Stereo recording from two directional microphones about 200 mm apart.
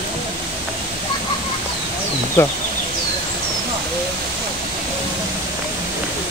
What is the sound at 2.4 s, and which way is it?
Speech, 10° left (ahead or behind).